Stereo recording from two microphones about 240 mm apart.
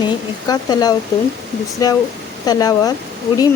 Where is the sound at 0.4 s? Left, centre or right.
Centre.